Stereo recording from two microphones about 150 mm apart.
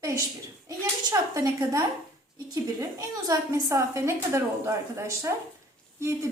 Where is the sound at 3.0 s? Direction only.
20° right (ahead or behind).